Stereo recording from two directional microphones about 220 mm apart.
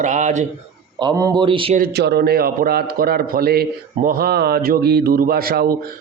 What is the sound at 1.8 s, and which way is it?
A man's voice, 45° right (ahead or behind).